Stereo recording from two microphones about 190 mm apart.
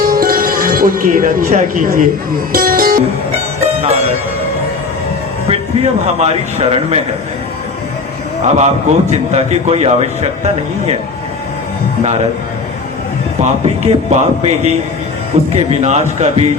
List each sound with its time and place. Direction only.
0.0 s music: 50° right (ahead or behind)
5.5 s a man's voice: 35° right (ahead or behind)
8.4 s a man's voice: 35° right (ahead or behind)
13.4 s a man's voice: 35° right (ahead or behind)